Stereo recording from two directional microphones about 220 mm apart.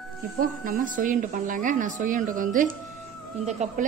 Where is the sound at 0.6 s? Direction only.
40° right (ahead or behind).